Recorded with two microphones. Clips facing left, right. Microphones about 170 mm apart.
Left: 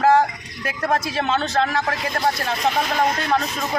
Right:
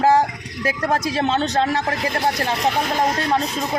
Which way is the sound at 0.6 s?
35° right (ahead or behind).